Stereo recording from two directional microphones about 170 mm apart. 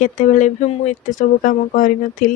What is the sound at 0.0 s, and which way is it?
Speech, 50° left (ahead or behind).